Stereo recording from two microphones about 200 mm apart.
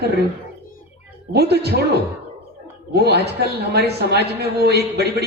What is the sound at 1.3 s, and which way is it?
A man's voice, 55° right (ahead or behind).